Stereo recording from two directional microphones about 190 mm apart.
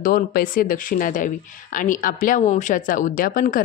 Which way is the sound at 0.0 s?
50° left (ahead or behind).